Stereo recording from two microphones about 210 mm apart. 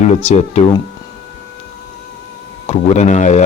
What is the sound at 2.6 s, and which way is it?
Speech, 30° left (ahead or behind).